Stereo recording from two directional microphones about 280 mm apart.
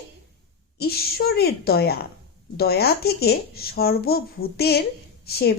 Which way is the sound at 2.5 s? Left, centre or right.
Left.